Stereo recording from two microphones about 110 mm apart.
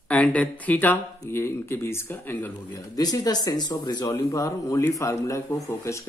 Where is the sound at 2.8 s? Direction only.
35° left (ahead or behind).